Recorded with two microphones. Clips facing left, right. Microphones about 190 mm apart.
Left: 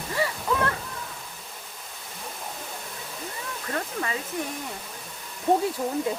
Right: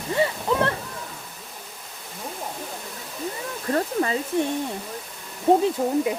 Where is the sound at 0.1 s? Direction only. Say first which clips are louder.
Right 4 dB; 25° right (ahead or behind).